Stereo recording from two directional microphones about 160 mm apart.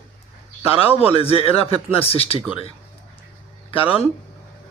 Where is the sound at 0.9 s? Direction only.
40° left (ahead or behind).